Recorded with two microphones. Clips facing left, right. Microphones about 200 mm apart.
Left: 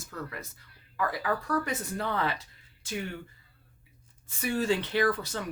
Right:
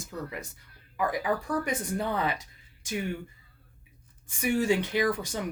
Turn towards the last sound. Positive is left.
turn(degrees=-15)  # may be behind; listen again after turning